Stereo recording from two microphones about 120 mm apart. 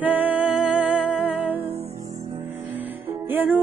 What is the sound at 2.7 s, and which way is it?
Music, 15° right (ahead or behind).